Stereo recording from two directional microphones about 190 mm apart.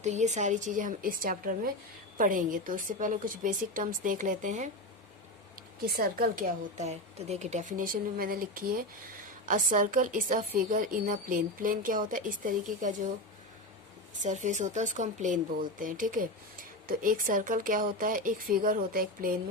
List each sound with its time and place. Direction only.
0.0 s a woman's voice: 40° right (ahead or behind)
5.8 s speech: 50° right (ahead or behind)
14.2 s a woman's voice: 40° right (ahead or behind)